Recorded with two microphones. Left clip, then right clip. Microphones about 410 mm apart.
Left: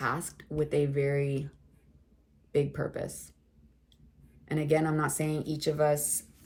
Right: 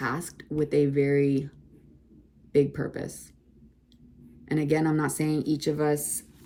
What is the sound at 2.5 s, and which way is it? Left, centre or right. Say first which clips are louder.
Speech: right 5 dB; centre.